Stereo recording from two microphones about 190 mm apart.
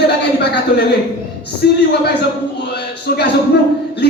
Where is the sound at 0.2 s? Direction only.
60° left (ahead or behind).